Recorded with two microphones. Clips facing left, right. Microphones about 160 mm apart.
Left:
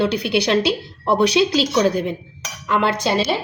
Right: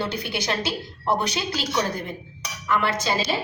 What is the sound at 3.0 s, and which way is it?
Speech, 65° left (ahead or behind).